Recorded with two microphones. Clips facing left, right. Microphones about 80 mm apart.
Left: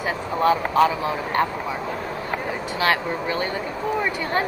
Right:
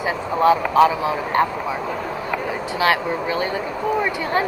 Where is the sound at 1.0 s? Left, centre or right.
Centre.